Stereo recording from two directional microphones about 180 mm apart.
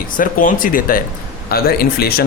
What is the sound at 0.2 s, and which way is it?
Speech, 50° left (ahead or behind).